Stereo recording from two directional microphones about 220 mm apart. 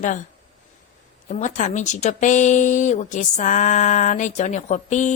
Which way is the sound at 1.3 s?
35° left (ahead or behind).